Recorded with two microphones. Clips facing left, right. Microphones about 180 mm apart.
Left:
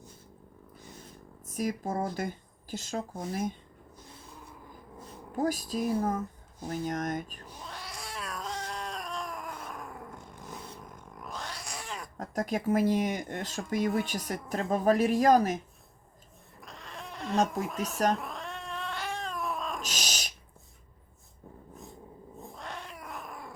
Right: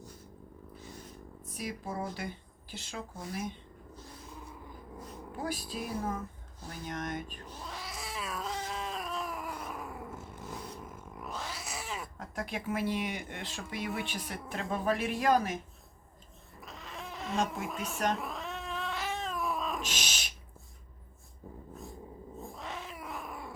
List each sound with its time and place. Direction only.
1.5 s speech: 45° left (ahead or behind)
5.4 s speech: 45° left (ahead or behind)
7.6 s cat: centre (ahead or behind)
12.1 s speech: 40° left (ahead or behind)
16.6 s cat: centre (ahead or behind)
19.8 s owl: 40° left (ahead or behind)
22.5 s cat: centre (ahead or behind)